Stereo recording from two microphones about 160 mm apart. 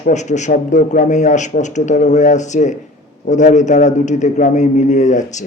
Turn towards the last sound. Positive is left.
turn(degrees=50)  # may be behind; listen again after turning